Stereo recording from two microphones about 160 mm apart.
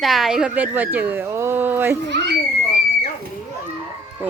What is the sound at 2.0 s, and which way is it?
Speech, 90° right.